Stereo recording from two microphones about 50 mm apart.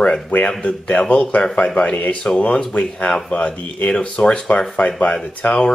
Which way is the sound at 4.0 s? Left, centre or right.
Centre.